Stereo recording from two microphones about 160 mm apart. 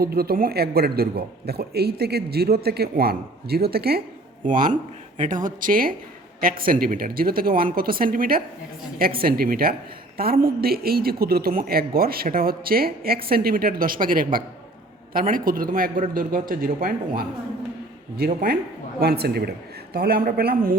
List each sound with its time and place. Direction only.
0.0 s a man's voice: 70° right (ahead or behind)
4.6 s a man's voice: 50° right (ahead or behind)
18.9 s a man's voice: 75° right (ahead or behind)